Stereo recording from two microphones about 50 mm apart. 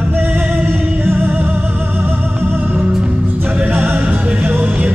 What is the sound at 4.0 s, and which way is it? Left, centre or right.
Music, right.